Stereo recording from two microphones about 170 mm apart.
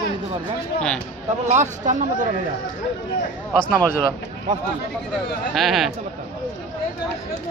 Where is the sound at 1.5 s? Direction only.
45° right (ahead or behind).